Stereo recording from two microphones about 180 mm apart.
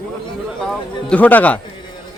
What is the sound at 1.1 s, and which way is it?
Speech, 10° left (ahead or behind).